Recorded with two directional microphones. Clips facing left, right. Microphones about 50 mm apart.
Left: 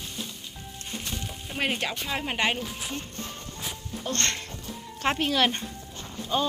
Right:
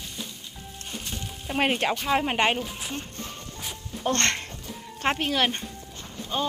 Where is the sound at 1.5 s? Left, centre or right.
Right.